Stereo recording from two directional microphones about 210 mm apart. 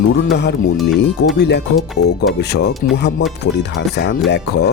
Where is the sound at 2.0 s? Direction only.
90° left.